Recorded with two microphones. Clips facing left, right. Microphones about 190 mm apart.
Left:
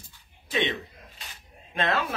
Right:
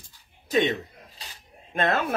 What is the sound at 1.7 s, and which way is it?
Speech, 50° right (ahead or behind).